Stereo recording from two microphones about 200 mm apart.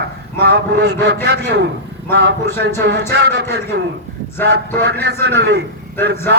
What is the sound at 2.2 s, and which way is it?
A man's voice, 55° right (ahead or behind).